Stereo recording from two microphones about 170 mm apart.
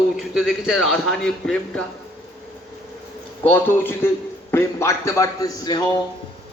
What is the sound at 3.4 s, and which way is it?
A man's voice, 10° left (ahead or behind).